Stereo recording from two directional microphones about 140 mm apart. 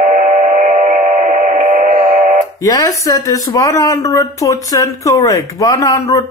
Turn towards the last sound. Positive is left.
turn(degrees=25)  # may be behind; listen again after turning